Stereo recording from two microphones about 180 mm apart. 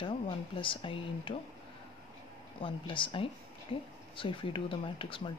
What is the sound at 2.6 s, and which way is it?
Speech, 30° left (ahead or behind).